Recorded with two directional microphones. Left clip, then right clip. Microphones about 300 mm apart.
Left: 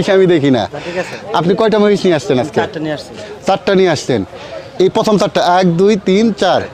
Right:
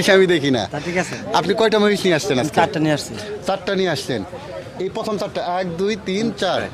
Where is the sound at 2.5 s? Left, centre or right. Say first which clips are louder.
Even; right.